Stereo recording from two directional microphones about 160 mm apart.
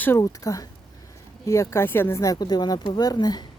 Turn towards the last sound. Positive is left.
turn(degrees=25)  # may be behind; listen again after turning